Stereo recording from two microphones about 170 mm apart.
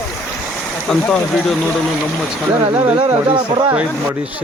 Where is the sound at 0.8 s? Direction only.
5° left (ahead or behind).